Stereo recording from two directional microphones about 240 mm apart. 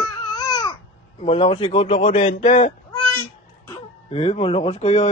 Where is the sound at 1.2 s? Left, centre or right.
Left.